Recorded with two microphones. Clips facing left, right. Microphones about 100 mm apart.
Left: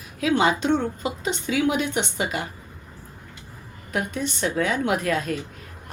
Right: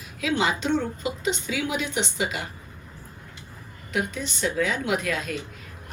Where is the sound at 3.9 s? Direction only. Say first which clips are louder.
Left 2 dB; 40° left (ahead or behind).